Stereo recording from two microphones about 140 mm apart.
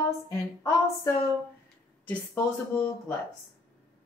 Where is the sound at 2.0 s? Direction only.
15° left (ahead or behind).